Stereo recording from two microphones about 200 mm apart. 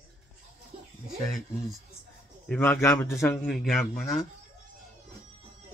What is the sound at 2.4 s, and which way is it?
Speech, 10° left (ahead or behind).